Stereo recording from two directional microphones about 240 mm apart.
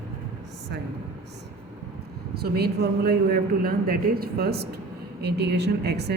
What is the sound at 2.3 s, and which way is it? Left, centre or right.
A man's voice, right.